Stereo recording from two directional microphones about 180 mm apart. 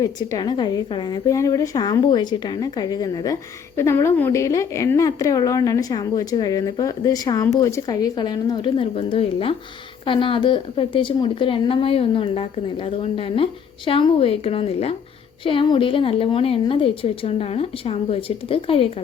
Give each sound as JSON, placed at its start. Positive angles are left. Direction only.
{"t": 0.0, "sound": "a woman's voice", "side_deg": 20}